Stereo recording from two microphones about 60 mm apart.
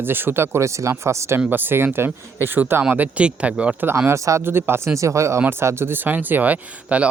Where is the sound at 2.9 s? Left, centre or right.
Right.